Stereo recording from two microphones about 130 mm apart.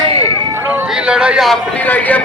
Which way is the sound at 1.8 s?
15° left (ahead or behind).